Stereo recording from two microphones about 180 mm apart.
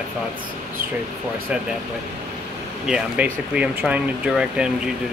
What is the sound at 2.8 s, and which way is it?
Speech, 5° right (ahead or behind).